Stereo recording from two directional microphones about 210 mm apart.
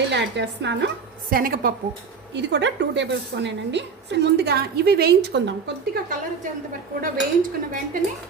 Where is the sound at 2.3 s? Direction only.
55° right (ahead or behind).